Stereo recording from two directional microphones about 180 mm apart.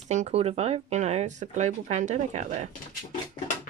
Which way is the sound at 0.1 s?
40° right (ahead or behind).